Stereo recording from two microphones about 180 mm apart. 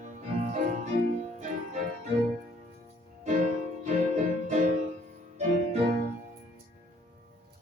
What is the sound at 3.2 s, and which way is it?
Music, 40° right (ahead or behind).